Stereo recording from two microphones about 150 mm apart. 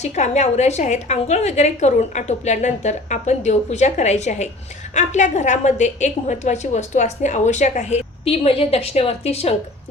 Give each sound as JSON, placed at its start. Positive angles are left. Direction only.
{"t": 0.0, "sound": "a woman's voice", "side_deg": 50}